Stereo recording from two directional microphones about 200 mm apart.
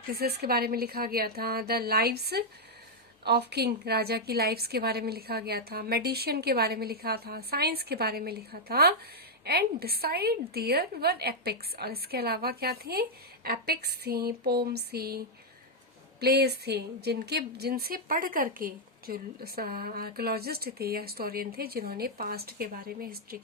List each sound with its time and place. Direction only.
0.1 s a woman's voice: 50° right (ahead or behind)
16.2 s a woman's voice: 55° right (ahead or behind)